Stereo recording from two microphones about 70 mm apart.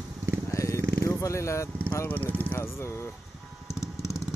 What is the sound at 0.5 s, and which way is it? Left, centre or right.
Vehicle, left.